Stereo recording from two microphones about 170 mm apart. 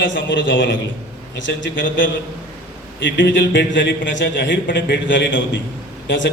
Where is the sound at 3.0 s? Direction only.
90° left.